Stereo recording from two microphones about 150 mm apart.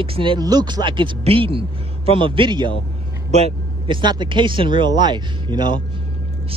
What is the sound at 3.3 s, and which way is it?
Vehicle, 45° right (ahead or behind).